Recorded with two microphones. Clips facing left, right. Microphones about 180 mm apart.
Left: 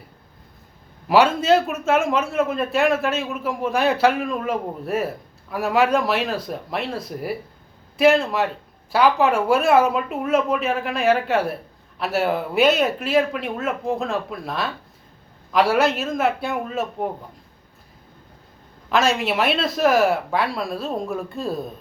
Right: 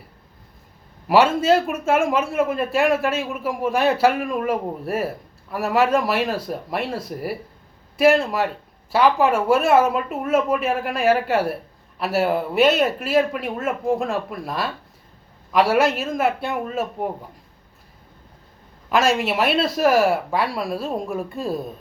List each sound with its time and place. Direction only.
1.0 s a woman's voice: 5° right (ahead or behind)
18.9 s speech: 5° right (ahead or behind)